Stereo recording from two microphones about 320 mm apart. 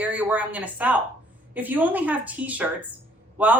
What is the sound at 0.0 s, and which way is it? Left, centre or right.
A woman's voice, centre.